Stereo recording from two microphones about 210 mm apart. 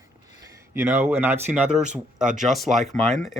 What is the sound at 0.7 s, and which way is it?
A man's voice, 10° right (ahead or behind).